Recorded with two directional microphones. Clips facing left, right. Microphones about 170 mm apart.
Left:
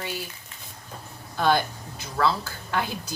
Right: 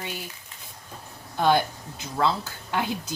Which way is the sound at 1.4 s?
15° right (ahead or behind).